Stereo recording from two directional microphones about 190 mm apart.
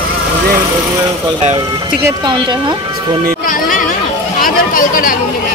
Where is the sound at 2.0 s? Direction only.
20° right (ahead or behind).